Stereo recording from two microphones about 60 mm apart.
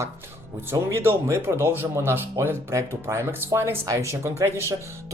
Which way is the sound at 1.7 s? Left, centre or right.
Right.